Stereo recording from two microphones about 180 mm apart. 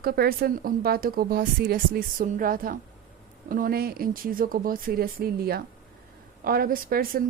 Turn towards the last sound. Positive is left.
turn(degrees=-55)  # may be behind; listen again after turning